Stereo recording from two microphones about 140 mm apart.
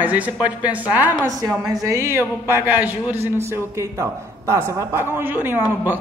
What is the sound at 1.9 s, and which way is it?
Speech, 20° right (ahead or behind).